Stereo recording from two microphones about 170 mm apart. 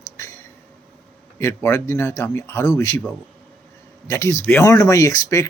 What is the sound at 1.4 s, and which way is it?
A man's voice, 15° left (ahead or behind).